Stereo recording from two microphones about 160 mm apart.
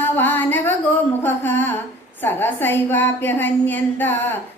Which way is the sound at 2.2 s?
15° left (ahead or behind).